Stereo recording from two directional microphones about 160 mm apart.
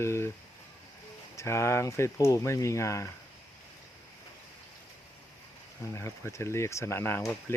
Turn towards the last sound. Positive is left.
turn(degrees=15)  # may be behind; listen again after turning